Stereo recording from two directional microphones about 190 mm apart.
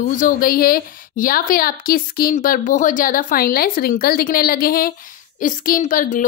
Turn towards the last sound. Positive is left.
turn(degrees=45)  # may be behind; listen again after turning